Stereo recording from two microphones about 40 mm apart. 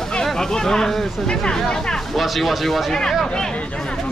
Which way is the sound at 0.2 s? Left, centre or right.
Centre.